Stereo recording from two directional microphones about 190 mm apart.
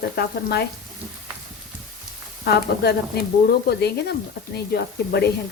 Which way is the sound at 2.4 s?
60° left (ahead or behind).